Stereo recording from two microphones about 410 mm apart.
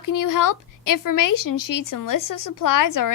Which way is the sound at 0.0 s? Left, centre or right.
Left.